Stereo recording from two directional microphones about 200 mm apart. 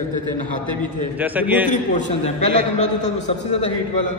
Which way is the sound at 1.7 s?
40° left (ahead or behind).